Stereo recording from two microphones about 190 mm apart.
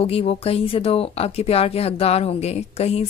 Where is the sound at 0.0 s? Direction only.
30° left (ahead or behind).